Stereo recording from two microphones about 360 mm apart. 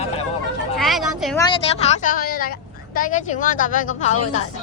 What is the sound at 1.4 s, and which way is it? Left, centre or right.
Speech, centre.